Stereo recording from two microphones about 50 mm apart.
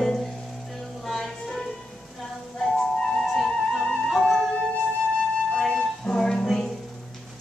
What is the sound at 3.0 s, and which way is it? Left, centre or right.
Music, centre.